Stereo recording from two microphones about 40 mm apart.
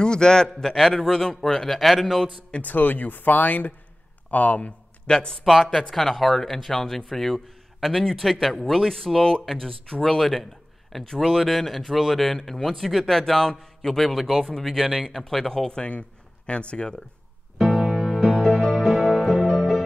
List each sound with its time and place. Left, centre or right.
0.0 s a man's voice: centre
1.8 s speech: centre
2.6 s speech: left
5.0 s speech: centre
5.4 s a man's voice: centre
15.8 s speech: left
17.6 s music: centre
18.4 s music: centre